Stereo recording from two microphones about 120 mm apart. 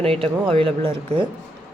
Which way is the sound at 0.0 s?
50° right (ahead or behind).